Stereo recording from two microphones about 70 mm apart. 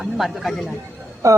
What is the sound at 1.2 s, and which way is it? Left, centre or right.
Speech, right.